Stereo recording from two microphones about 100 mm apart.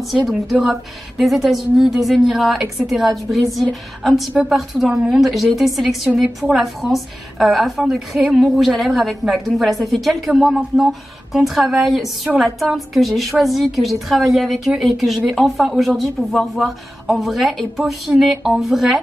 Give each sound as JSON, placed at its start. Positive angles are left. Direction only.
{"t": 0.3, "sound": "a woman's voice", "side_deg": 0}